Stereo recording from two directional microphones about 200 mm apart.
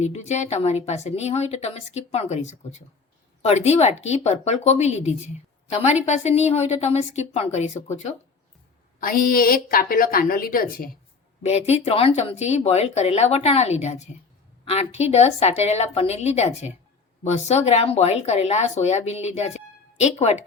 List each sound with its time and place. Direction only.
0.0 s speech: 35° left (ahead or behind)
9.0 s a woman's voice: 45° left (ahead or behind)
11.4 s speech: 30° left (ahead or behind)